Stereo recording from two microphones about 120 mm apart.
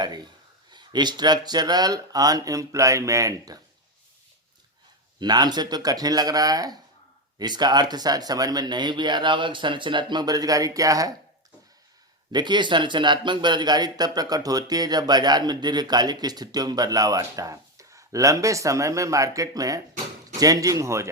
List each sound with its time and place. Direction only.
0.7 s speech: 40° right (ahead or behind)
5.2 s speech: 35° right (ahead or behind)
12.3 s speech: 40° right (ahead or behind)